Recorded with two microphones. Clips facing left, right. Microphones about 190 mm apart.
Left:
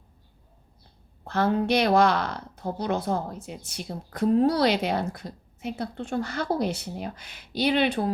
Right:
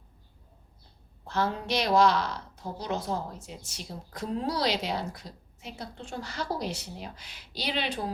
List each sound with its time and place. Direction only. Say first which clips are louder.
1.3 s a woman's voice: left 6 dB; 60° left (ahead or behind)